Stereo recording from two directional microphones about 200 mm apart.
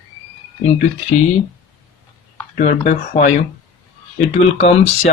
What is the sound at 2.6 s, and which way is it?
Speech, 40° left (ahead or behind).